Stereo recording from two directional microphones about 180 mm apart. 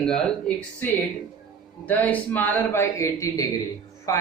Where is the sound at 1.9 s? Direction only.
10° left (ahead or behind).